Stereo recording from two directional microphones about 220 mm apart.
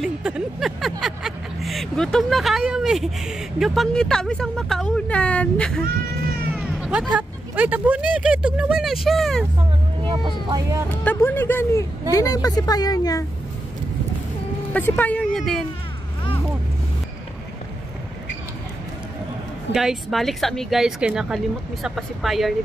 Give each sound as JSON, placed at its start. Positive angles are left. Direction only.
{"t": 0.0, "sound": "speech", "side_deg": -5}
{"t": 10.0, "sound": "speech", "side_deg": -20}
{"t": 10.9, "sound": "speech", "side_deg": 10}
{"t": 14.7, "sound": "speech", "side_deg": 5}
{"t": 19.7, "sound": "speech", "side_deg": 0}